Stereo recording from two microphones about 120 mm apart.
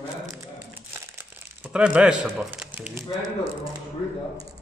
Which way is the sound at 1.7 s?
10° right (ahead or behind).